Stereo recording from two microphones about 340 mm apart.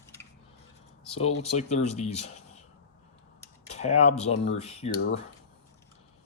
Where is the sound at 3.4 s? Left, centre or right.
Centre.